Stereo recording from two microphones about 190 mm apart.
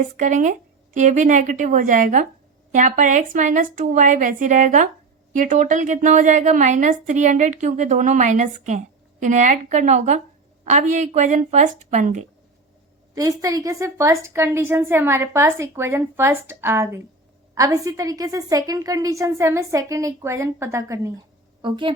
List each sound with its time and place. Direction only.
0.0 s a woman's voice: 40° right (ahead or behind)
13.1 s a woman's voice: 20° right (ahead or behind)
21.6 s a woman's voice: 25° right (ahead or behind)